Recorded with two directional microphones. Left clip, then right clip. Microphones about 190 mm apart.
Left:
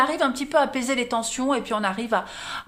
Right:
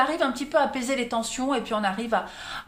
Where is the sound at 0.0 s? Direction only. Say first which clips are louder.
Left 2 dB; 35° left (ahead or behind).